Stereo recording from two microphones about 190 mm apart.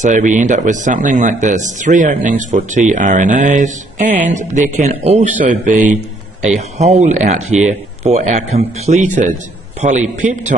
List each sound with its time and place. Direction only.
0.0 s speech: 40° right (ahead or behind)